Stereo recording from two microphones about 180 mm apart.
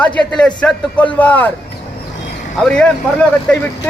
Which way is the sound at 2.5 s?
5° left (ahead or behind).